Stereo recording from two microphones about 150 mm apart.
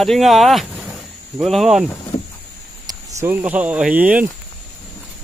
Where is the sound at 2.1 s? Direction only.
35° left (ahead or behind).